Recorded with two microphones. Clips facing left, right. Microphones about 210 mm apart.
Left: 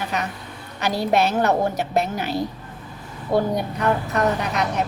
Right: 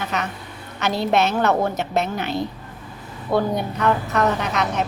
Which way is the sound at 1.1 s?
35° left (ahead or behind).